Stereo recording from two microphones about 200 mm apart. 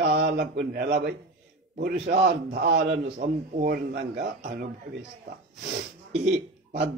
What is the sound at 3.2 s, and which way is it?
A man's voice, 40° right (ahead or behind).